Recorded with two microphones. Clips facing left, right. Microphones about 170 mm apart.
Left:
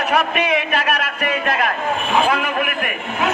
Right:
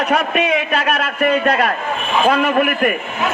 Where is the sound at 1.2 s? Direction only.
40° right (ahead or behind).